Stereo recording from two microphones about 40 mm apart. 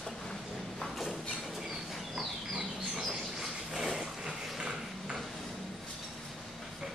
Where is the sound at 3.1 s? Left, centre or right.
Centre.